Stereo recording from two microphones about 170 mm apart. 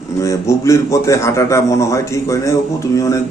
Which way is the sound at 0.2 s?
20° left (ahead or behind).